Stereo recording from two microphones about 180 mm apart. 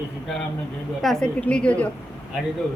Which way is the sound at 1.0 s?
Centre (ahead or behind).